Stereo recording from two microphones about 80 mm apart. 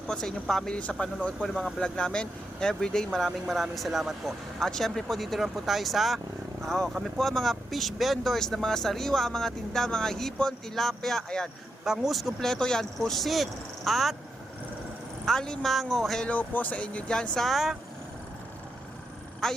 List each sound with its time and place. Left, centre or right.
0.1 s speech: centre
15.2 s speech: centre
16.2 s speech: centre
17.3 s speech: centre
19.4 s speech: centre